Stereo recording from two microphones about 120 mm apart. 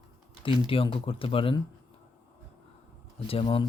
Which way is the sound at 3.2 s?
50° left (ahead or behind).